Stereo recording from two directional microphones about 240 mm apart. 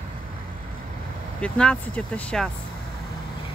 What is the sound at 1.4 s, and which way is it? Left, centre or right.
Speech, centre.